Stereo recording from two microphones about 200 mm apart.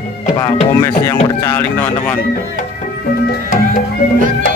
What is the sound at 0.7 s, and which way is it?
Music, 15° left (ahead or behind).